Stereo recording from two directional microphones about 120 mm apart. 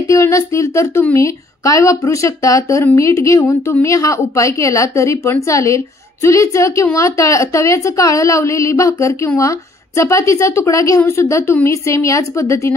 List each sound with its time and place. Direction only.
0.0 s speech: 25° left (ahead or behind)